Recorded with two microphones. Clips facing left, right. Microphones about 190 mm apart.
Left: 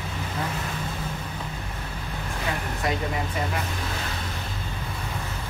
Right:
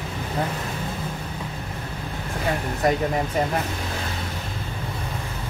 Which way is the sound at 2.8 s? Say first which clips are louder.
Right 7 dB; 45° right (ahead or behind).